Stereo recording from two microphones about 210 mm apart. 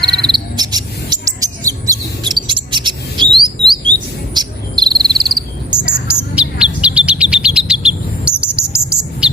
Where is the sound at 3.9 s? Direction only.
20° right (ahead or behind).